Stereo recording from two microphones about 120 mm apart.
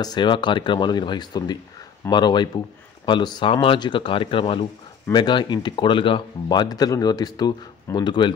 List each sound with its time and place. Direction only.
0.0 s speech: 40° left (ahead or behind)